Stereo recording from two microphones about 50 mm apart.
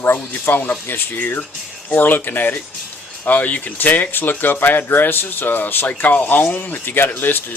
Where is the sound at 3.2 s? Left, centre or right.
Left.